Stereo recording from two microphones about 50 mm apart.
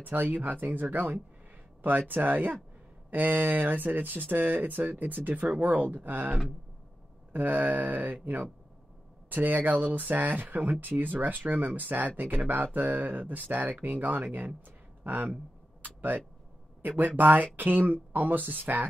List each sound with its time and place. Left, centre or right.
0.0 s speech: right
15.8 s a sound: right
16.8 s speech: right